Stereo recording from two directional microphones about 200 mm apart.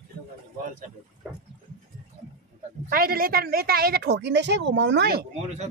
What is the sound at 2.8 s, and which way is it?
A woman's voice, 45° right (ahead or behind).